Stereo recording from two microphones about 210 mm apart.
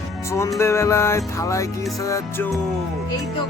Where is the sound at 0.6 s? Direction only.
15° left (ahead or behind).